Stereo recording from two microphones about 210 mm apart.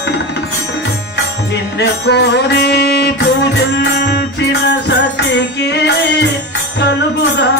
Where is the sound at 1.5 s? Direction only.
55° left (ahead or behind).